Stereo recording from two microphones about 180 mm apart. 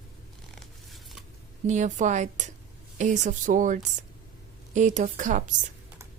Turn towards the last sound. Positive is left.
turn(degrees=-45)  # may be behind; listen again after turning